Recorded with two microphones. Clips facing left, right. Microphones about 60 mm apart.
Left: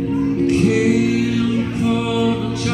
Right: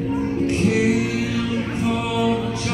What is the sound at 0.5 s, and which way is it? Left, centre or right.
Music, centre.